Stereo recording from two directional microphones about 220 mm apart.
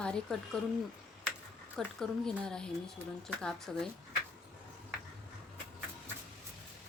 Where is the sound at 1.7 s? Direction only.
Centre (ahead or behind).